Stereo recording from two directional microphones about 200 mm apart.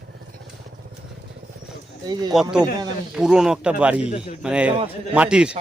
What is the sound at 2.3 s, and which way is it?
A man's voice, 5° right (ahead or behind).